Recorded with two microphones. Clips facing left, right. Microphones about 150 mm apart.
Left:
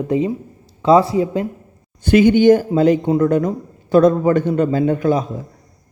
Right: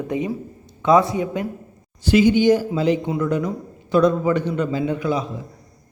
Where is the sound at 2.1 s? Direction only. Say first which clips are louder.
Left 4 dB; 55° left (ahead or behind).